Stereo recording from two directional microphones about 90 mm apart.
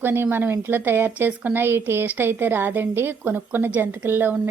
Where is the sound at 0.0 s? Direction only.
25° right (ahead or behind).